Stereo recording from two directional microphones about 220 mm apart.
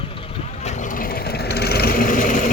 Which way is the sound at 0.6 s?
35° left (ahead or behind).